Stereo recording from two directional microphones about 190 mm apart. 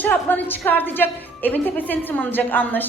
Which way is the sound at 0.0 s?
10° left (ahead or behind).